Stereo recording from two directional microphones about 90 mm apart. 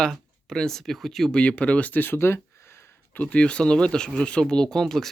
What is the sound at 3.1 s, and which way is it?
Speech, 15° left (ahead or behind).